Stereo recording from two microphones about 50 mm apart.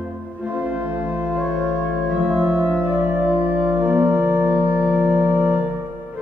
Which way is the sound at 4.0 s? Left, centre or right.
Right.